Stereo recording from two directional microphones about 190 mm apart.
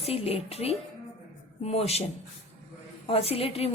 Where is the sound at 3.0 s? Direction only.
30° left (ahead or behind).